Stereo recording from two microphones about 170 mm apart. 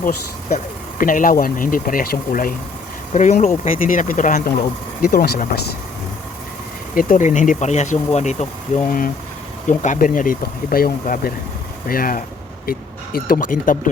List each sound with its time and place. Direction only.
0.5 s speech: 50° left (ahead or behind)
5.0 s speech: 60° left (ahead or behind)
6.9 s speech: 55° left (ahead or behind)